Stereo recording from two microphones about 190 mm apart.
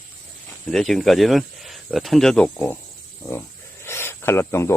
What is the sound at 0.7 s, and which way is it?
Speech, centre (ahead or behind).